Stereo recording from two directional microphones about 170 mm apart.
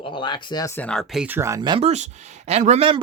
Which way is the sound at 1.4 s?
20° right (ahead or behind).